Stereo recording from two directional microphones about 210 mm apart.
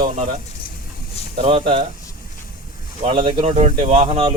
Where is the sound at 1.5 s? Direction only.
25° right (ahead or behind).